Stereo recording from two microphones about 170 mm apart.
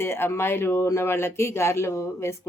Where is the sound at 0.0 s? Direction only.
15° left (ahead or behind).